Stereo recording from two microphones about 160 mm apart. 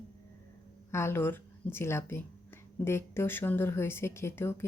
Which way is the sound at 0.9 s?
15° left (ahead or behind).